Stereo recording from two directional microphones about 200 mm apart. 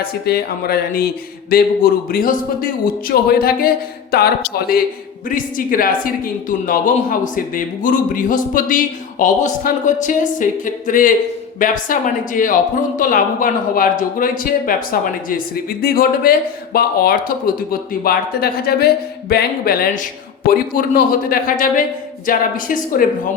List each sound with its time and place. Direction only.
0.0 s speech: 50° left (ahead or behind)